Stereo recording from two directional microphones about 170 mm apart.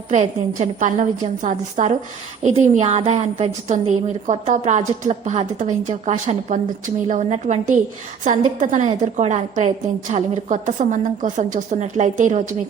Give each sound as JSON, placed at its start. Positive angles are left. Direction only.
{"t": 0.1, "sound": "a woman's voice", "side_deg": -45}